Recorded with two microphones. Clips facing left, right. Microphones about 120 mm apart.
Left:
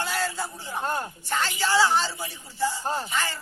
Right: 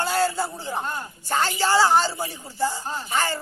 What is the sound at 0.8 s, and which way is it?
Speech, 45° left (ahead or behind).